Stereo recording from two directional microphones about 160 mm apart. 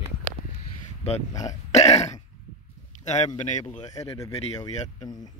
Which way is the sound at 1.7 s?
40° left (ahead or behind).